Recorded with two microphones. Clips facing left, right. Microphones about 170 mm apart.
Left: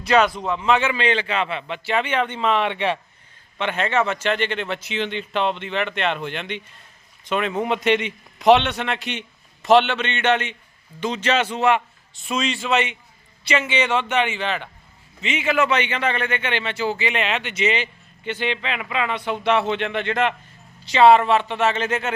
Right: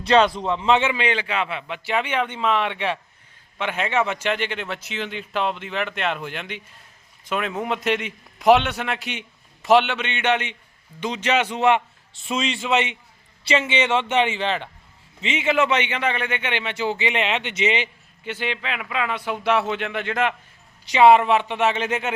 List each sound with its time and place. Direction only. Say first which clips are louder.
0.0 s a man's voice: right 1 dB; 30° right (ahead or behind)
18.2 s a man's voice: left 3 dB; 5° right (ahead or behind)